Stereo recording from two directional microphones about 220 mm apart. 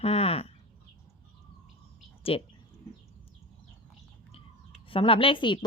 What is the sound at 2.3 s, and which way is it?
Speech, 25° left (ahead or behind).